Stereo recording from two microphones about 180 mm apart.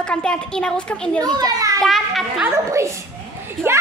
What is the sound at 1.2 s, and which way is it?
Speech, 20° right (ahead or behind).